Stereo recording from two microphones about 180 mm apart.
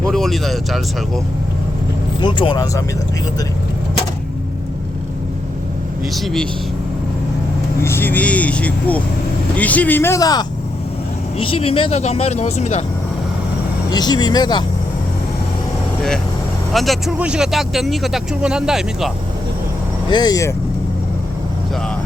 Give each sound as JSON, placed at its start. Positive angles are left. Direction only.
{"t": 0.0, "sound": "speech", "side_deg": 0}
{"t": 2.2, "sound": "speech", "side_deg": 25}
{"t": 6.1, "sound": "speech", "side_deg": 5}
{"t": 7.9, "sound": "speech", "side_deg": 10}
{"t": 11.3, "sound": "speech", "side_deg": 30}
{"t": 13.9, "sound": "speech", "side_deg": 20}
{"t": 16.7, "sound": "speech", "side_deg": 0}
{"t": 20.1, "sound": "speech", "side_deg": 25}